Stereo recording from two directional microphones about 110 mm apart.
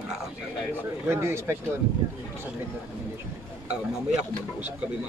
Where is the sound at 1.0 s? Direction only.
20° right (ahead or behind).